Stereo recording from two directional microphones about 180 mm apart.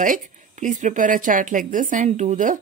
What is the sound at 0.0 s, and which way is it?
A woman's voice, 45° right (ahead or behind).